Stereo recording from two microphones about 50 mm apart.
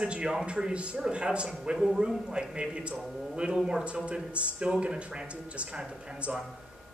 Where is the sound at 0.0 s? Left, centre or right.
Right.